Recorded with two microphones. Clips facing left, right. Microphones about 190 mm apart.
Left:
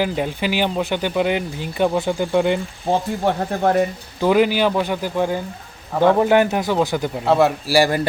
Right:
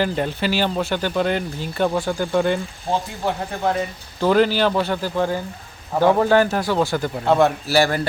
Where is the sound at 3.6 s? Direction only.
55° left (ahead or behind).